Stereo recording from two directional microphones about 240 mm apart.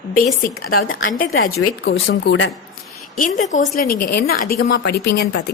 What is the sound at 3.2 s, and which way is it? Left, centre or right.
A woman's voice, left.